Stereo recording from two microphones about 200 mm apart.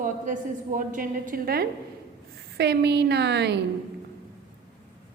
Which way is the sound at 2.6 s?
55° right (ahead or behind).